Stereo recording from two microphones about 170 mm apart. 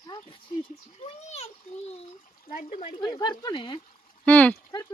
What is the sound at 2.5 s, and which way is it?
Speech, 55° left (ahead or behind).